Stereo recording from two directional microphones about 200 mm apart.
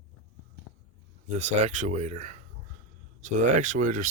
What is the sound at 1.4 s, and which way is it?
Speech, 35° right (ahead or behind).